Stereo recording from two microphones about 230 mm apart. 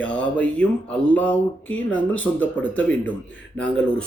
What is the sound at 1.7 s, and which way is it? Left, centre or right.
Speech, left.